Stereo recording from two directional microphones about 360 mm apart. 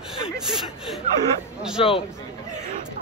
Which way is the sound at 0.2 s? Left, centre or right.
Centre.